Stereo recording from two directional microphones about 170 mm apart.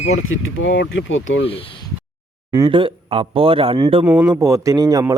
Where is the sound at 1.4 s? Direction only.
35° left (ahead or behind).